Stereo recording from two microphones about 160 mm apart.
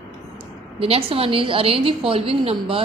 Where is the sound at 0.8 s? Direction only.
35° right (ahead or behind).